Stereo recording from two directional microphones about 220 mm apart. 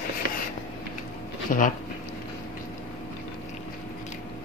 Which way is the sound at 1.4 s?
35° left (ahead or behind).